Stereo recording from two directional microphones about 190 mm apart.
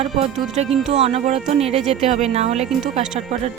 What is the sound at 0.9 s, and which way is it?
Speech, 35° right (ahead or behind).